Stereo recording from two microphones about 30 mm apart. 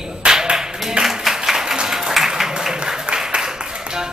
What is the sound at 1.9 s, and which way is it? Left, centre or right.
Applause, centre.